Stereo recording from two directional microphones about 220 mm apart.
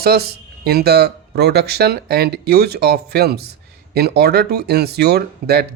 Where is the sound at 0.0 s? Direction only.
45° right (ahead or behind).